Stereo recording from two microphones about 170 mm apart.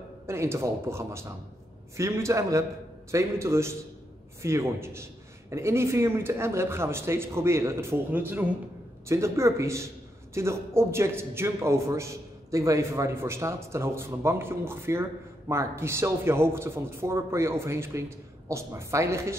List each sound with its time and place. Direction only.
0.3 s a man's voice: 15° right (ahead or behind)